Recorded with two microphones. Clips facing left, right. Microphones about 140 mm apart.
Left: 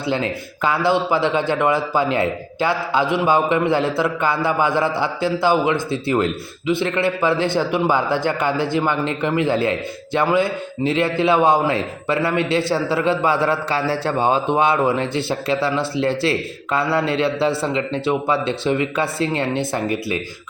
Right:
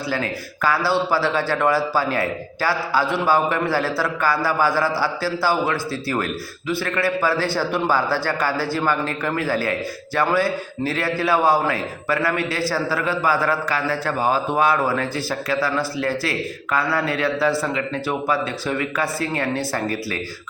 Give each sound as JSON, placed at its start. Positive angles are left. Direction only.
{"t": 0.1, "sound": "a man's voice", "side_deg": 20}